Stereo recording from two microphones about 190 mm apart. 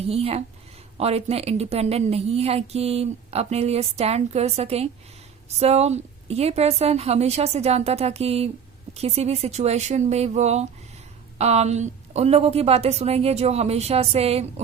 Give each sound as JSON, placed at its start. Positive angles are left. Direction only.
{"t": 0.0, "sound": "a woman's voice", "side_deg": -30}